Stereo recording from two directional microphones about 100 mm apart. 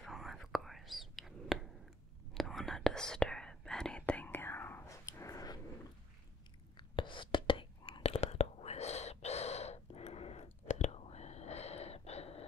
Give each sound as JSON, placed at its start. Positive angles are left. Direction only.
{"t": 0.0, "sound": "whispering", "side_deg": 0}
{"t": 6.8, "sound": "whispering", "side_deg": 55}